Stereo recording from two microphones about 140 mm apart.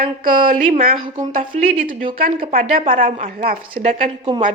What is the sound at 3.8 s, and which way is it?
Speech, 50° right (ahead or behind).